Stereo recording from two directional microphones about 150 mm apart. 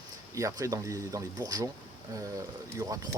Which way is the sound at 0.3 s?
20° right (ahead or behind).